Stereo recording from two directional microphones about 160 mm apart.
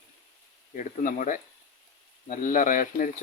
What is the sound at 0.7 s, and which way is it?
Speech, 55° left (ahead or behind).